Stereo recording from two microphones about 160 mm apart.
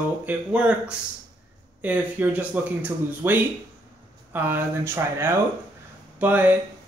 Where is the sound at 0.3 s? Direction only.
10° right (ahead or behind).